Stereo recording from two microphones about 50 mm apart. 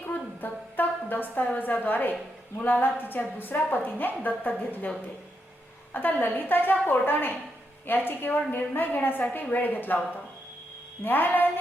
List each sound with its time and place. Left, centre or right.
0.1 s a sound: left
1.5 s a woman's voice: left
5.9 s a woman's voice: left
11.0 s a woman's voice: left